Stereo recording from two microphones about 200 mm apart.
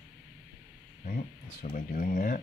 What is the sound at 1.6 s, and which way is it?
Speech, 40° left (ahead or behind).